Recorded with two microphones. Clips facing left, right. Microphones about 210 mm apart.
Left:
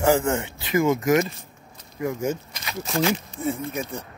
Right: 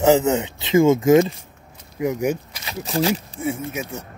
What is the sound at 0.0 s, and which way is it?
Speech, 20° right (ahead or behind).